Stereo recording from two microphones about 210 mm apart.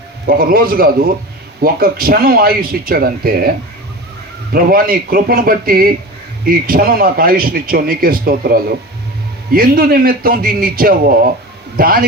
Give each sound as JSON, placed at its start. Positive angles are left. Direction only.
{"t": 0.3, "sound": "speech", "side_deg": -45}
{"t": 4.5, "sound": "speech", "side_deg": -45}